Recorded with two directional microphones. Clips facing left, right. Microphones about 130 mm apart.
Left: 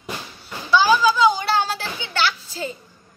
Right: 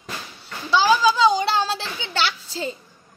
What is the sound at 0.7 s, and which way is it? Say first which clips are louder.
Children playing: left 1 dB; 30° right (ahead or behind).